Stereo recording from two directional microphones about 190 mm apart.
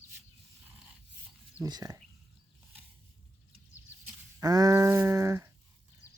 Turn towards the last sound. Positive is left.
turn(degrees=-15)  # may be behind; listen again after turning